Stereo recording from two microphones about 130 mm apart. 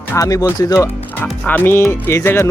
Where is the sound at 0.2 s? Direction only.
25° left (ahead or behind).